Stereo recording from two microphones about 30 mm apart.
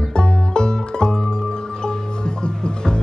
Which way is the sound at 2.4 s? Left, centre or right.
Left.